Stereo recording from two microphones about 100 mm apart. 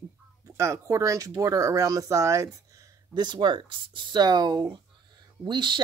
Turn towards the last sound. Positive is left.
turn(degrees=-50)  # may be behind; listen again after turning